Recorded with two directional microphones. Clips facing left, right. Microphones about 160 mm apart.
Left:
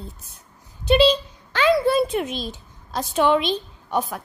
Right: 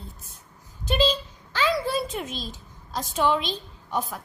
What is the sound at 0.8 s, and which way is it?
A woman's voice, 70° left (ahead or behind).